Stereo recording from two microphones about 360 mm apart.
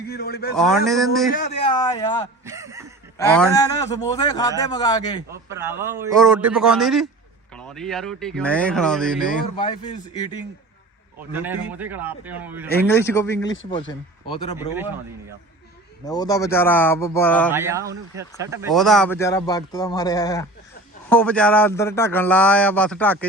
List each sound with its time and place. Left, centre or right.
0.1 s a man's voice: left
0.5 s speech: centre
1.3 s a man's voice: centre
2.4 s a sound: centre
3.2 s a man's voice: centre
5.3 s speech: centre
9.6 s a man's voice: centre
11.3 s speech: centre
12.9 s a man's voice: centre
16.0 s a man's voice: centre
17.5 s speech: centre